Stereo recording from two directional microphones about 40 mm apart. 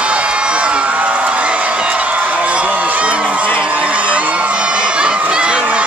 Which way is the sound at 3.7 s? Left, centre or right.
Right.